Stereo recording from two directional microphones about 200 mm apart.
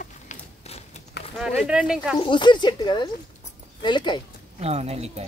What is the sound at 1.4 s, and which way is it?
Speech, 5° right (ahead or behind).